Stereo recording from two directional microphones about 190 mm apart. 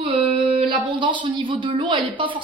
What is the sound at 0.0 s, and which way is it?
Speech, 30° right (ahead or behind).